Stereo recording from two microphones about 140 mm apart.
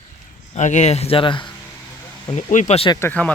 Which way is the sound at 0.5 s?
55° left (ahead or behind).